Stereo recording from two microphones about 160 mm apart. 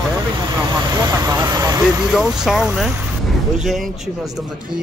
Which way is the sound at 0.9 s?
25° right (ahead or behind).